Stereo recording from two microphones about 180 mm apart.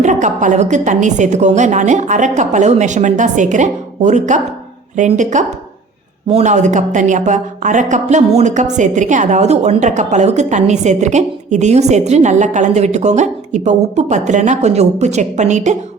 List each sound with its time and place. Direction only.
0.0 s a woman's voice: 45° right (ahead or behind)